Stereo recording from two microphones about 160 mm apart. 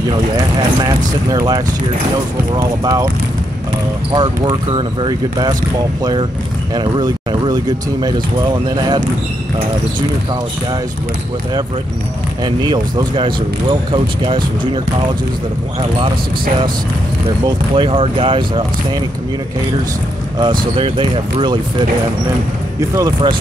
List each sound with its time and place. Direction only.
0.6 s speech: 25° right (ahead or behind)
4.1 s speech: 30° right (ahead or behind)
6.7 s speech: 25° right (ahead or behind)
12.4 s speech: 25° right (ahead or behind)
17.5 s speech: 35° right (ahead or behind)
20.3 s speech: 30° right (ahead or behind)